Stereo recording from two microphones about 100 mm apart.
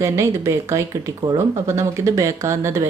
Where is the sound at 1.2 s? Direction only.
40° right (ahead or behind).